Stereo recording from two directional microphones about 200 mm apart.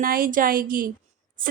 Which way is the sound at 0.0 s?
45° right (ahead or behind).